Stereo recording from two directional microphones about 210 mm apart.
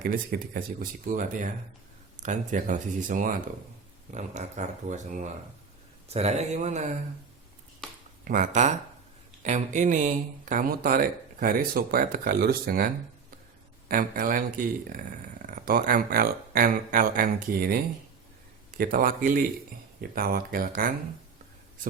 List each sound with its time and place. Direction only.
0.0 s speech: 45° right (ahead or behind)
7.8 s a sound: centre (ahead or behind)
8.2 s speech: 40° right (ahead or behind)
18.8 s speech: 40° right (ahead or behind)